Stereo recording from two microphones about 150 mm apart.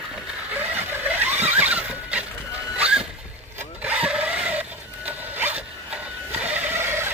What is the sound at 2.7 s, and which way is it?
Zipper, 5° right (ahead or behind).